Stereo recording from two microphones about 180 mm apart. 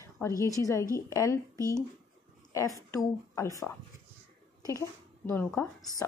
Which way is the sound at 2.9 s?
15° left (ahead or behind).